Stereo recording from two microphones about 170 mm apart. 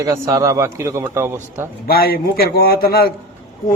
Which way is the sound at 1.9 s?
60° left (ahead or behind).